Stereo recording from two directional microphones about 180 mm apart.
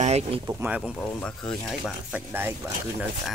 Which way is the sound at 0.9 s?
5° left (ahead or behind).